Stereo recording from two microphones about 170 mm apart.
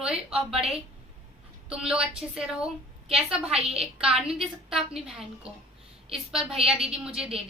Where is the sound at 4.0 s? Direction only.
5° right (ahead or behind).